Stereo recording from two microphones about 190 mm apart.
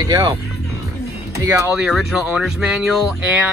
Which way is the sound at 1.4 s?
15° right (ahead or behind).